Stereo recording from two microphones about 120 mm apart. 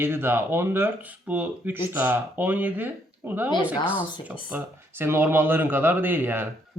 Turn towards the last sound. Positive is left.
turn(degrees=-15)  # may be behind; listen again after turning